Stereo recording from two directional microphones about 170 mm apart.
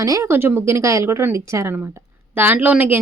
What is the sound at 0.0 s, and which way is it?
Speech, 20° right (ahead or behind).